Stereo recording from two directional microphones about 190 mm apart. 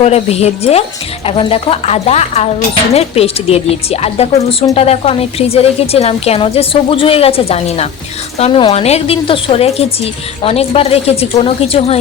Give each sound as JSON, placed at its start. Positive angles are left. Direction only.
{"t": 0.0, "sound": "a woman's voice", "side_deg": 35}